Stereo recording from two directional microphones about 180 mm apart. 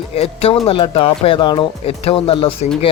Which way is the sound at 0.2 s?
35° left (ahead or behind).